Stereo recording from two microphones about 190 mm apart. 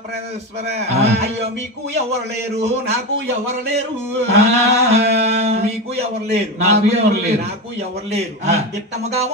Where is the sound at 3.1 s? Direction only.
60° right (ahead or behind).